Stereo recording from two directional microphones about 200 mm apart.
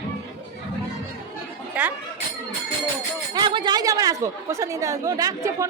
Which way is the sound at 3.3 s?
25° right (ahead or behind).